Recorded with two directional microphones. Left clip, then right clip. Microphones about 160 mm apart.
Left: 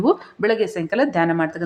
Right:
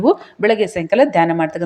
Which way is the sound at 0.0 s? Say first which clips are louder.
Right 4 dB; 15° right (ahead or behind).